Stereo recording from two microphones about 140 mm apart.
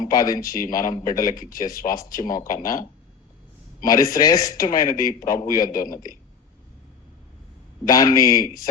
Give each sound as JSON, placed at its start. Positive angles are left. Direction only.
{"t": 0.0, "sound": "speech", "side_deg": 25}
{"t": 0.5, "sound": "a man's voice", "side_deg": 80}
{"t": 0.8, "sound": "speech", "side_deg": 25}
{"t": 1.4, "sound": "a man's voice", "side_deg": 80}
{"t": 1.8, "sound": "speech", "side_deg": 55}
{"t": 2.4, "sound": "speech", "side_deg": 25}
{"t": 3.8, "sound": "speech", "side_deg": 25}
{"t": 5.0, "sound": "a man's voice", "side_deg": 80}
{"t": 5.4, "sound": "speech", "side_deg": 25}
{"t": 5.7, "sound": "a man's voice", "side_deg": 80}
{"t": 7.9, "sound": "speech", "side_deg": 25}